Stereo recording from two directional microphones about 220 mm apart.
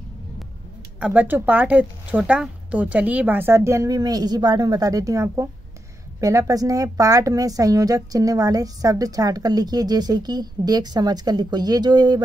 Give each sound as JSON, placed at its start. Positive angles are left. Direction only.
{"t": 0.9, "sound": "a woman's voice", "side_deg": -5}